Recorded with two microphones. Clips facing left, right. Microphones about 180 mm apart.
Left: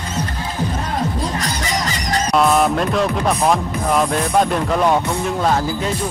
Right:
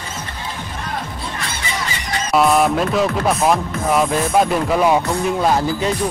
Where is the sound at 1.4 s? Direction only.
40° left (ahead or behind).